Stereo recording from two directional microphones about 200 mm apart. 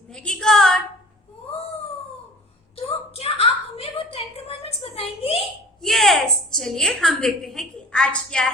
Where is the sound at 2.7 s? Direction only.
30° left (ahead or behind).